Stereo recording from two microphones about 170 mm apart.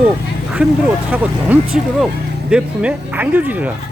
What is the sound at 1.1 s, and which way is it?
Speech, 10° right (ahead or behind).